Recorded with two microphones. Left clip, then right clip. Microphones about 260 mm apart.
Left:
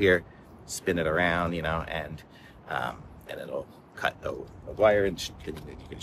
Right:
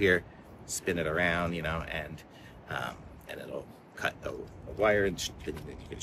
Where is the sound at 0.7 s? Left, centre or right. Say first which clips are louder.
Left 4 dB; centre.